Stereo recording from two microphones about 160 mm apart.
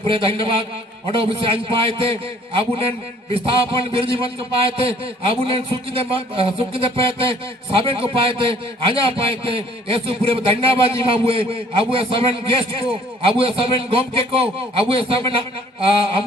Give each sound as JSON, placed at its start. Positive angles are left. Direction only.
{"t": 0.1, "sound": "a man's voice", "side_deg": -35}